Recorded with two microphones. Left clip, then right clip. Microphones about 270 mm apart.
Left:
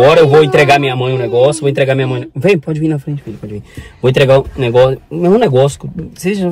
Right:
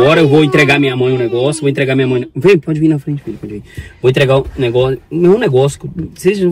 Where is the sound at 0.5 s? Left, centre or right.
Centre.